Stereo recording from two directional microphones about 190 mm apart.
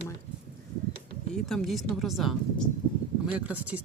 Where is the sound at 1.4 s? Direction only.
Centre (ahead or behind).